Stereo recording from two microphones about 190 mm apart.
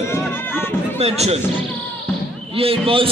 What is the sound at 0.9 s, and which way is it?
Speech, 35° right (ahead or behind).